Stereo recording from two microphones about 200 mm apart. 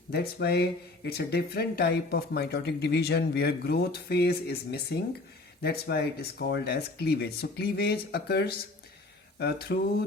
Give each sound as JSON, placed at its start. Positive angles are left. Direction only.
{"t": 0.1, "sound": "speech", "side_deg": 55}